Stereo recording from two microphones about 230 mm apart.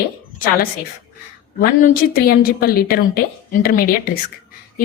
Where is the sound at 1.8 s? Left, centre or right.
Left.